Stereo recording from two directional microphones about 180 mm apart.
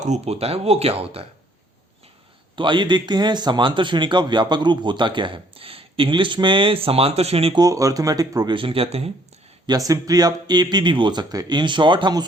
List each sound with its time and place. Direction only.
0.0 s speech: 40° right (ahead or behind)
2.6 s a man's voice: 25° right (ahead or behind)
7.6 s a man's voice: 20° right (ahead or behind)
9.6 s a man's voice: 20° right (ahead or behind)